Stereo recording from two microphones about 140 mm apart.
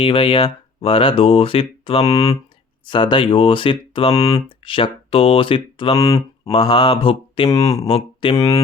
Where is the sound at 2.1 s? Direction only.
25° left (ahead or behind).